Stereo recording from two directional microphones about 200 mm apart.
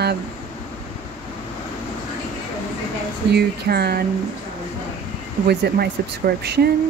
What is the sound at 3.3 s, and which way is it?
Speech, 55° right (ahead or behind).